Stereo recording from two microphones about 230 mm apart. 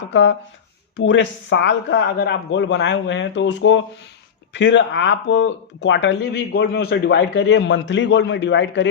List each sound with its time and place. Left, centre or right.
0.1 s speech: left